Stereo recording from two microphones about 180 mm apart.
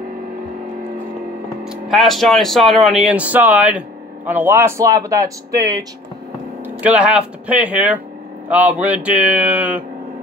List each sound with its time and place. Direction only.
1.6 s speech: centre (ahead or behind); by 5.9 s 20° right (ahead or behind)
6.6 s speech: 10° right (ahead or behind)